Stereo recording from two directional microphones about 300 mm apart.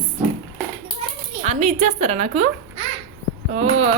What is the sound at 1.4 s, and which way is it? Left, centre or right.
A woman's voice, right.